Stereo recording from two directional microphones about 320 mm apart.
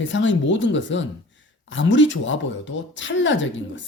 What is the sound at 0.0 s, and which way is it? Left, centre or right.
Speech, left.